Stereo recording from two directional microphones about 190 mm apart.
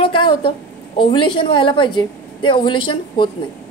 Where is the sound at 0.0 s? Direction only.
25° left (ahead or behind).